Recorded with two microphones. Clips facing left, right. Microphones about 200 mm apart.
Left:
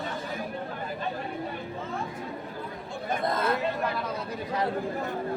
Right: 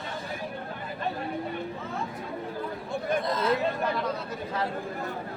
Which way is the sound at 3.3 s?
55° left (ahead or behind).